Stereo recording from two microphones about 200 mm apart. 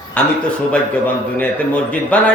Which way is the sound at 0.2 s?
5° left (ahead or behind).